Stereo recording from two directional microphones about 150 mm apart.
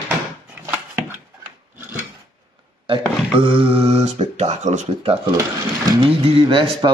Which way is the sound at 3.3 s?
40° right (ahead or behind).